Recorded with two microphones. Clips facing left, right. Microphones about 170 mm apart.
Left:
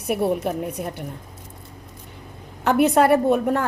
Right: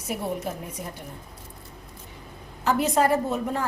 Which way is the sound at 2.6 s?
65° left (ahead or behind).